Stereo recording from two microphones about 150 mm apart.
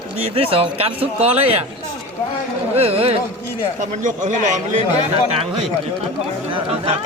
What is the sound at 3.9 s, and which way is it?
Speech, 55° right (ahead or behind).